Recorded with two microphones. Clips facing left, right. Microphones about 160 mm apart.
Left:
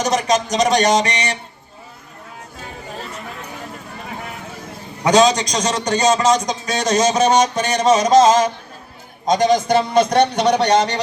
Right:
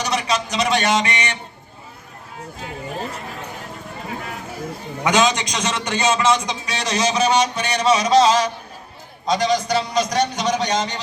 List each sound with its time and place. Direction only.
0.0 s speech: 45° left (ahead or behind)
5.0 s a man's voice: 35° left (ahead or behind); by 11.0 s 70° left (ahead or behind)